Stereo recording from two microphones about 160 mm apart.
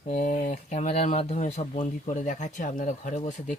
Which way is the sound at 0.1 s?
45° left (ahead or behind).